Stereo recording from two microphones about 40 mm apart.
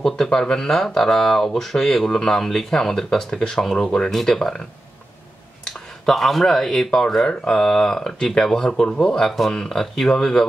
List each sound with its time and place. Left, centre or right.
0.0 s speech: centre
5.7 s speech: centre; by 9.2 s left
9.2 s speech: centre